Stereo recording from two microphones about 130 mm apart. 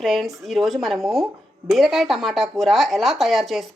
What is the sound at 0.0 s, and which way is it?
Speech, centre (ahead or behind).